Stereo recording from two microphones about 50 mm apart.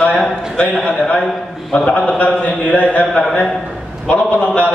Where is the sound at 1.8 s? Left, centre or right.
Left.